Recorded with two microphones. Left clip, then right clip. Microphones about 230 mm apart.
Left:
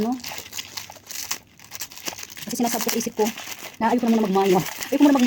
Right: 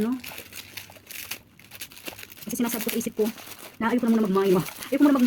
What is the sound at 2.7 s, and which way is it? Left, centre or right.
Speech, centre.